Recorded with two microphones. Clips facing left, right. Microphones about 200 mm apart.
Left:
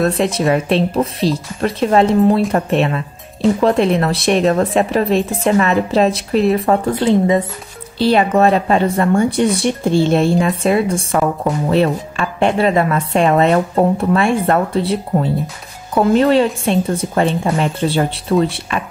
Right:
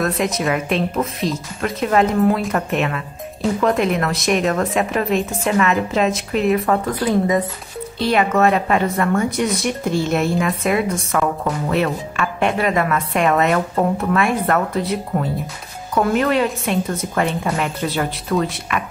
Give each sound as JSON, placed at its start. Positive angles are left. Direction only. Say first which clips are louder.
{"t": 0.0, "sound": "a woman's voice", "louder": "left 4 dB", "side_deg": 30}